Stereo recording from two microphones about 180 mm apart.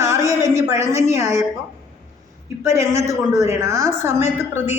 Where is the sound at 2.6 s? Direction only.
15° right (ahead or behind).